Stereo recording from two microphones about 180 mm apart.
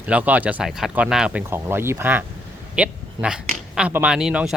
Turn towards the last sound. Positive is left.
turn(degrees=-5)  # may be behind; listen again after turning